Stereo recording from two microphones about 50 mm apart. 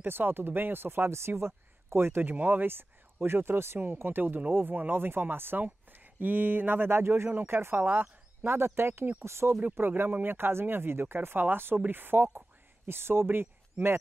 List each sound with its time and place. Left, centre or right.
0.0 s speech: right
2.2 s speech: right
2.6 s speech: right
3.8 s speech: right
7.7 s speech: right
8.5 s speech: right
9.8 s speech: right
13.8 s speech: right